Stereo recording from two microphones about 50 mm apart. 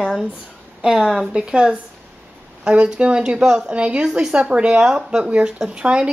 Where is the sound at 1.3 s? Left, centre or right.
Centre.